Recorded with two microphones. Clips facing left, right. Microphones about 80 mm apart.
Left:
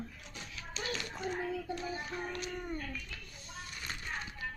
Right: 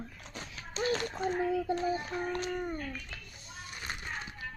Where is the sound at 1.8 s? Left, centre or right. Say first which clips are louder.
Right 6 dB; centre.